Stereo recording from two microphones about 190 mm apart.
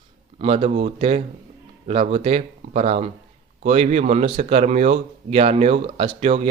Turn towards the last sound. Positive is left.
turn(degrees=-30)  # may be behind; listen again after turning